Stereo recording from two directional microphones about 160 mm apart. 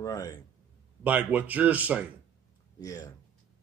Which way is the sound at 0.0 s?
20° left (ahead or behind).